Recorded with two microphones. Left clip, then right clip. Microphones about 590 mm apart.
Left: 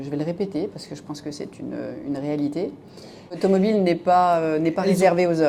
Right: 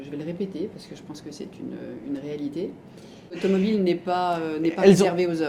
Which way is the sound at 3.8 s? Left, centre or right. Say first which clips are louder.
Left 9 dB; left.